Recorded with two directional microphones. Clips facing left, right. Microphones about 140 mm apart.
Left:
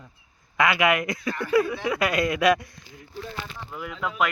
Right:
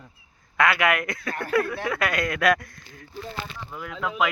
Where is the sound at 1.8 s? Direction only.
20° left (ahead or behind).